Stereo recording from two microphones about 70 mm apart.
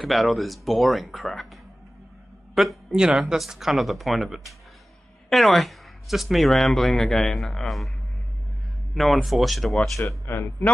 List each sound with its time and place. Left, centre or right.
0.0 s a man's voice: centre
8.9 s speech: centre
9.9 s speech: left
10.3 s speech: left